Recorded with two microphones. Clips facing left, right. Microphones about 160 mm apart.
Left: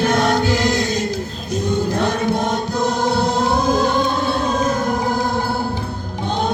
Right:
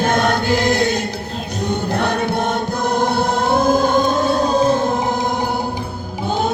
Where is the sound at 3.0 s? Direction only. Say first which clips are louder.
Even; 55° right (ahead or behind).